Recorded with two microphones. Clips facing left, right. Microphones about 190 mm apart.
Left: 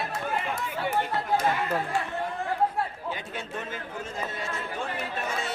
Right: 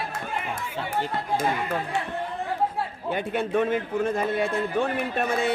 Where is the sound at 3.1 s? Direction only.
60° right (ahead or behind).